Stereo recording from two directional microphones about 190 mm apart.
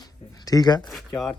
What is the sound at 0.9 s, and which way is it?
Speech, centre (ahead or behind).